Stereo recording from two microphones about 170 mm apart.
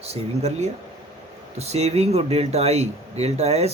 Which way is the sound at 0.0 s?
40° right (ahead or behind).